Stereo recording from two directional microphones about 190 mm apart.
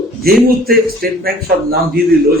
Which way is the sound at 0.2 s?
55° right (ahead or behind).